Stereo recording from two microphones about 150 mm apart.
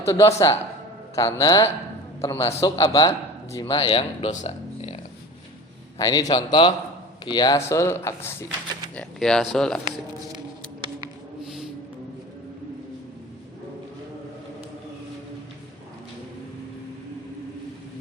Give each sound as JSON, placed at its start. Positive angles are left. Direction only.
{"t": 0.0, "sound": "speech", "side_deg": 20}
{"t": 3.8, "sound": "speech", "side_deg": 40}
{"t": 6.0, "sound": "speech", "side_deg": 25}
{"t": 9.0, "sound": "speech", "side_deg": 5}